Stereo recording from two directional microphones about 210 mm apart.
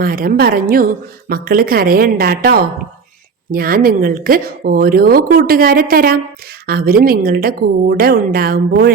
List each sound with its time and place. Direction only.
0.0 s speech: 45° right (ahead or behind)